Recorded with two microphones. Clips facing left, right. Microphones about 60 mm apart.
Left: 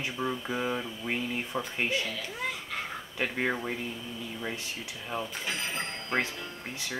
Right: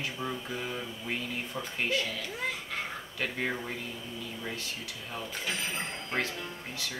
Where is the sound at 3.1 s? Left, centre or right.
Left.